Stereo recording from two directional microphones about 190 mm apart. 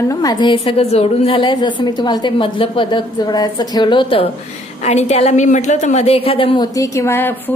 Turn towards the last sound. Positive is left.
turn(degrees=10)  # may be behind; listen again after turning